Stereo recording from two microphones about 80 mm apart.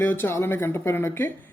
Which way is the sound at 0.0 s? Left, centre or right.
Left.